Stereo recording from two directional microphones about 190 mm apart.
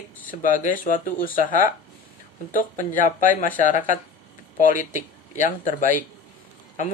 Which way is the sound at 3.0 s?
45° left (ahead or behind).